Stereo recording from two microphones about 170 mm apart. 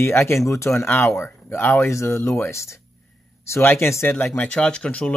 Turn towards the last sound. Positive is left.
turn(degrees=5)  # may be behind; listen again after turning